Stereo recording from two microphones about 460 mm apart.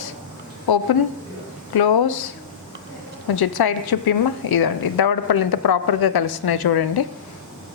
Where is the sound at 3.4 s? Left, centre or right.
Left.